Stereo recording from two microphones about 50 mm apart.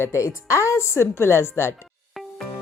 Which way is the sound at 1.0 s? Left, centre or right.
Left.